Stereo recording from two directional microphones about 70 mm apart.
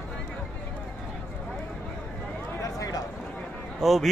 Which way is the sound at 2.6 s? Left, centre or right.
Left.